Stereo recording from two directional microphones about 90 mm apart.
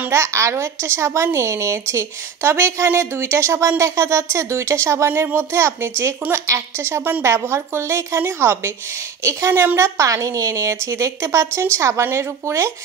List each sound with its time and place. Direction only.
0.1 s a woman's voice: 30° right (ahead or behind)